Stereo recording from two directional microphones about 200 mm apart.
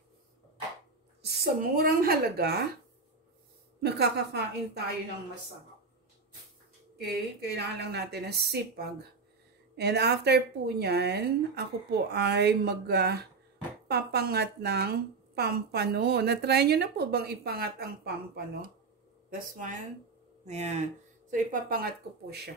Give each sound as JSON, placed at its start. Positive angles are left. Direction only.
{"t": 1.2, "sound": "a woman's voice", "side_deg": -55}
{"t": 3.8, "sound": "a woman's voice", "side_deg": -55}
{"t": 7.1, "sound": "a woman's voice", "side_deg": -55}
{"t": 20.4, "sound": "a woman's voice", "side_deg": -35}